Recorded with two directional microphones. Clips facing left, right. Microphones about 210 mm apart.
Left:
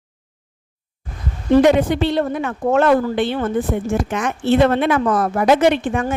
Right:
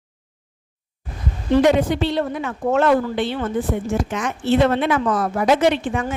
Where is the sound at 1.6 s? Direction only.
55° left (ahead or behind).